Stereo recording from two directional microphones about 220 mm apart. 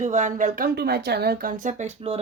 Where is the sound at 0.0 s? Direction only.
35° right (ahead or behind).